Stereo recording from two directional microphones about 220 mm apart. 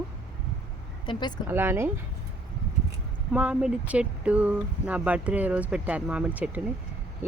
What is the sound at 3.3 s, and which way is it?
Speech, 5° right (ahead or behind).